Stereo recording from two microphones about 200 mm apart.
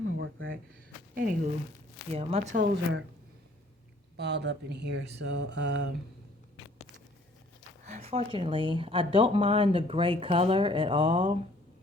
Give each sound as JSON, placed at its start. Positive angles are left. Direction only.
{"t": 1.1, "sound": "speech", "side_deg": -45}
{"t": 2.1, "sound": "speech", "side_deg": -30}
{"t": 2.6, "sound": "speech", "side_deg": -60}
{"t": 4.2, "sound": "speech", "side_deg": -55}
{"t": 7.9, "sound": "speech", "side_deg": -35}